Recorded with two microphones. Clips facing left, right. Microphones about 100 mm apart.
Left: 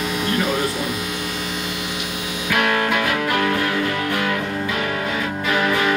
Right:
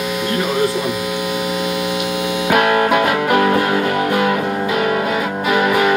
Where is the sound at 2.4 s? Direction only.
35° right (ahead or behind).